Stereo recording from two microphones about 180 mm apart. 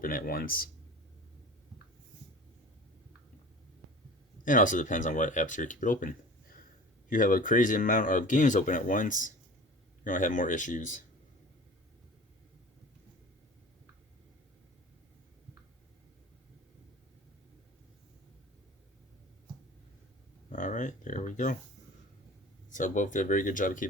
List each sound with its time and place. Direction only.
0.0 s speech: 50° left (ahead or behind)
4.4 s speech: 45° left (ahead or behind)
20.5 s speech: 45° left (ahead or behind)
22.7 s speech: 45° left (ahead or behind)